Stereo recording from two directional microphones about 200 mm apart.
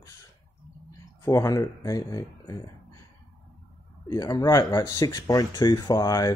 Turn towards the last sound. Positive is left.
turn(degrees=20)  # may be behind; listen again after turning